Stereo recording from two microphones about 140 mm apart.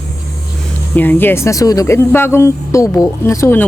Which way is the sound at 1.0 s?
15° left (ahead or behind).